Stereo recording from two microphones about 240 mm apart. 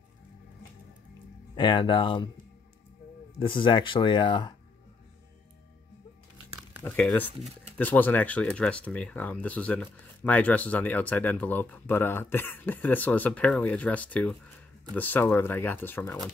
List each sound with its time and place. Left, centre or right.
1.5 s speech: centre
3.3 s speech: left
6.8 s speech: centre